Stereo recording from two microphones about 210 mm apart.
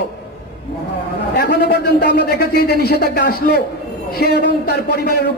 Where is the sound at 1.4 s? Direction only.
50° left (ahead or behind).